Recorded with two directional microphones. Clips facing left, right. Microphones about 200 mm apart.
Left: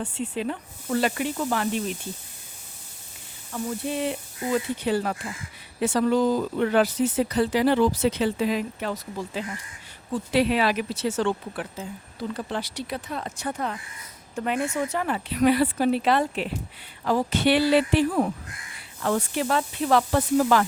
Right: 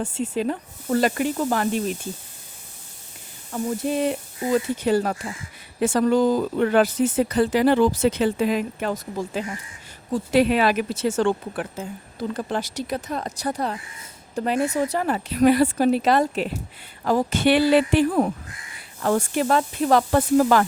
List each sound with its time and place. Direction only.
0.0 s speech: 45° right (ahead or behind)
3.5 s a woman's voice: 45° right (ahead or behind)